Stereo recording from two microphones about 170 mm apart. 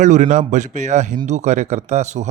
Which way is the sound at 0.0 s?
45° right (ahead or behind).